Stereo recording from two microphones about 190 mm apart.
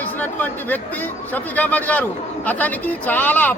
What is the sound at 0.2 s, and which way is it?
Speech, 10° left (ahead or behind).